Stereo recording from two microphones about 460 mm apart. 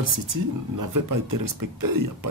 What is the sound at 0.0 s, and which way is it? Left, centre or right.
Speech, right.